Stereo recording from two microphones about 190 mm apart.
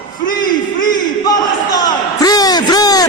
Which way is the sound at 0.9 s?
20° left (ahead or behind).